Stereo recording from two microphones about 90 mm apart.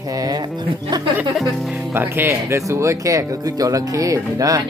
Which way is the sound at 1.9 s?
25° right (ahead or behind).